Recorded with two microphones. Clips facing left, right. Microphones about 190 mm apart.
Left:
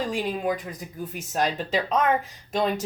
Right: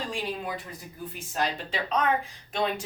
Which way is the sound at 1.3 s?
45° left (ahead or behind).